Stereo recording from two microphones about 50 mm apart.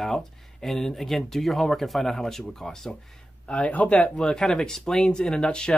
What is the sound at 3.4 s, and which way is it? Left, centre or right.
Speech, left.